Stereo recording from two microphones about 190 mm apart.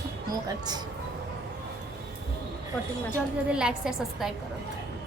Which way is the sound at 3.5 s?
5° right (ahead or behind).